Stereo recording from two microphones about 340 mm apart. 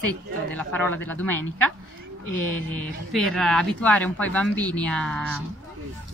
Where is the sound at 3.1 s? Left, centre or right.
Centre.